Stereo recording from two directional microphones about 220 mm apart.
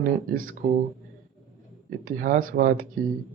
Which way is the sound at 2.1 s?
40° right (ahead or behind).